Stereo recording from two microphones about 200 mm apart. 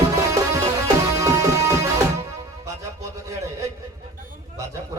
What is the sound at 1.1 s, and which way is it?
Music, 15° right (ahead or behind).